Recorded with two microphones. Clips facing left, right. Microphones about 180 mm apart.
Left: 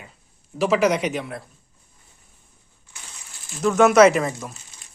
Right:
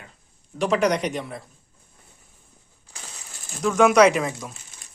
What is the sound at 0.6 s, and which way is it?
Speech, 5° left (ahead or behind).